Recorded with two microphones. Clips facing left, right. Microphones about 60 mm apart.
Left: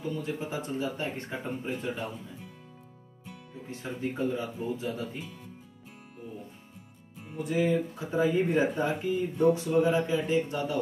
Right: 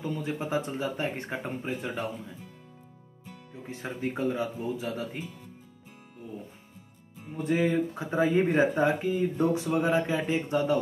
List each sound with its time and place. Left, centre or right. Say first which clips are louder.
0.0 s speech: right 1 dB; right
3.6 s speech: right 1 dB; right
7.4 s speech: right 1 dB; right